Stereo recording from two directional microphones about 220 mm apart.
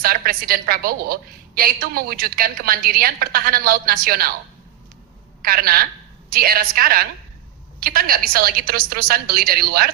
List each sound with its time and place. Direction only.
0.0 s a woman's voice: 40° right (ahead or behind)
5.4 s a woman's voice: 45° right (ahead or behind)